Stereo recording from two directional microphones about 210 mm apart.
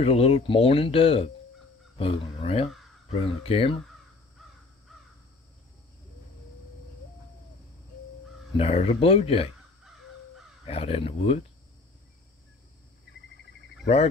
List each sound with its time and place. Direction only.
0.0 s speech: 25° left (ahead or behind)
8.5 s speech: 30° left (ahead or behind)
10.6 s speech: 30° left (ahead or behind)